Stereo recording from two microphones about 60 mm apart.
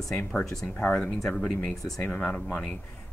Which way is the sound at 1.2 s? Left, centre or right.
Centre.